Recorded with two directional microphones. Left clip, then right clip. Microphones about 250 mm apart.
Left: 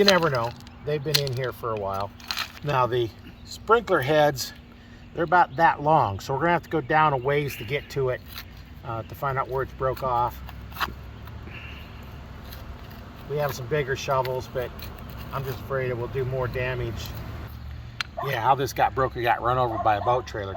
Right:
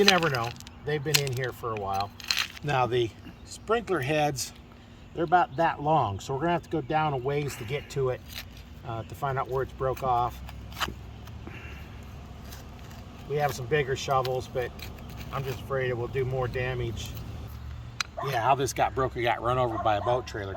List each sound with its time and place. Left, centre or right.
0.0 s speech: centre
10.8 s vehicle: centre
13.3 s speech: centre
14.2 s speech: right
14.5 s speech: centre
18.3 s speech: centre